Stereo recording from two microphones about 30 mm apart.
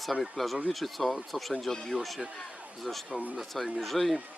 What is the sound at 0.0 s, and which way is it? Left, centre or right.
Speech, centre.